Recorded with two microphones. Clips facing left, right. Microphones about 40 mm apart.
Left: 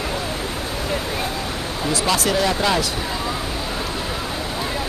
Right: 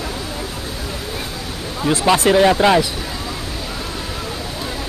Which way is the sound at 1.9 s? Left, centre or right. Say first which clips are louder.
Right 6 dB; right.